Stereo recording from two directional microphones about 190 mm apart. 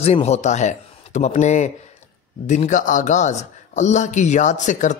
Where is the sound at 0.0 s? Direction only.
35° left (ahead or behind).